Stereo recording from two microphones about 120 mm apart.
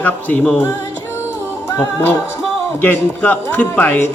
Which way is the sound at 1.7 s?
20° left (ahead or behind).